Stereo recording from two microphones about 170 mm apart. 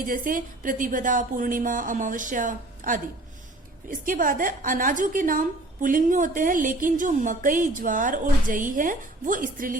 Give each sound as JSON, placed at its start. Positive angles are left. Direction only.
{"t": 0.0, "sound": "a woman's voice", "side_deg": -55}